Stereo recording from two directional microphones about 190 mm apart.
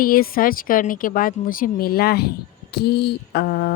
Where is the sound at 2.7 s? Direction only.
60° left (ahead or behind).